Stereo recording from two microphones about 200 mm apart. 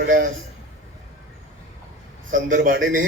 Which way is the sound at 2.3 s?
45° right (ahead or behind).